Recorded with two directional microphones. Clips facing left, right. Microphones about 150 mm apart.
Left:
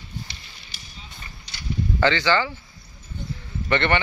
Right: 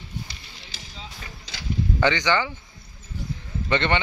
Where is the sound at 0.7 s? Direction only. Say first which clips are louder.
Right 4 dB; 90° right.